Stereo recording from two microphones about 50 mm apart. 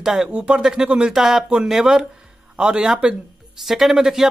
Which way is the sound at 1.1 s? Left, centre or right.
Centre.